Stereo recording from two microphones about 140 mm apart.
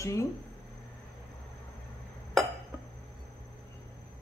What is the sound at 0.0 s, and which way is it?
Speech, 20° left (ahead or behind).